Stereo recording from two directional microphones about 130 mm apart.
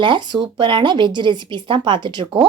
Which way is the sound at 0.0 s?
40° right (ahead or behind).